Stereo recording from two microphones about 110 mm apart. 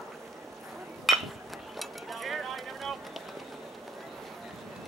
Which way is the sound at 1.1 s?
Centre (ahead or behind).